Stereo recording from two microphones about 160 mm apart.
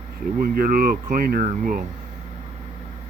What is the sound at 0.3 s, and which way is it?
Speech, 65° right (ahead or behind).